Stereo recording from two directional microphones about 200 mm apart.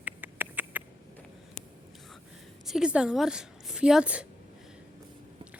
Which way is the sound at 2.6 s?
5° right (ahead or behind).